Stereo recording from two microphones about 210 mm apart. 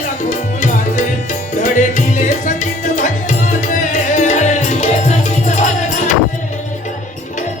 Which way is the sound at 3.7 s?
40° left (ahead or behind).